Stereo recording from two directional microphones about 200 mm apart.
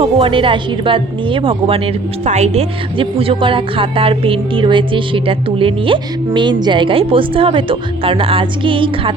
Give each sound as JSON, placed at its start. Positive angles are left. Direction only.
{"t": 0.0, "sound": "speech", "side_deg": -25}